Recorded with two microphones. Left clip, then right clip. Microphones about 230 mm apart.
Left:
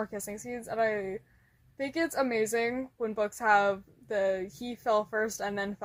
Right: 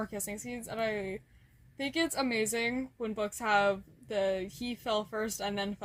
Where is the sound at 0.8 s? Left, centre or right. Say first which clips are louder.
Left 3 dB; right.